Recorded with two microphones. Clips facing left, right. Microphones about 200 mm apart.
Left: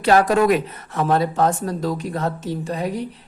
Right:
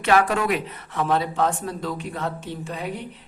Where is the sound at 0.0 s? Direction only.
35° left (ahead or behind).